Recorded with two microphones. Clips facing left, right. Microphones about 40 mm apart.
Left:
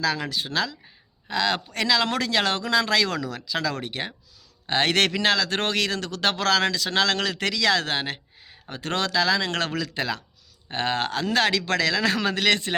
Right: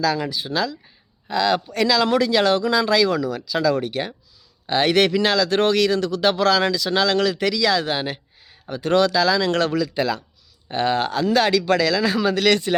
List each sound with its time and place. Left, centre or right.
0.0 s speech: left
12.5 s speech: left